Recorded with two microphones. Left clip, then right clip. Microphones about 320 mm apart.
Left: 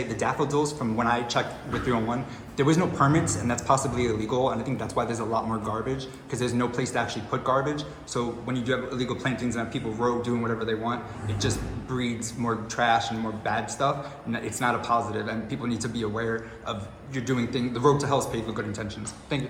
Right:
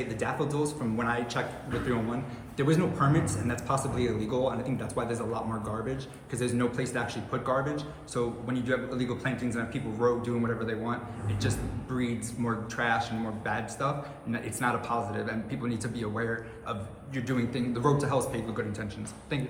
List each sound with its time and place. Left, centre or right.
0.1 s a man's voice: centre
2.6 s a man's voice: centre